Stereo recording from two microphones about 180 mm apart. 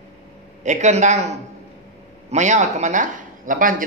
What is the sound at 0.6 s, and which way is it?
A man's voice, 40° right (ahead or behind).